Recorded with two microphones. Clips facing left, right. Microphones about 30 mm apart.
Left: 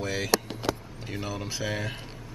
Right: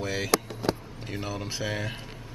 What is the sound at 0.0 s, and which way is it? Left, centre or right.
Speech, centre.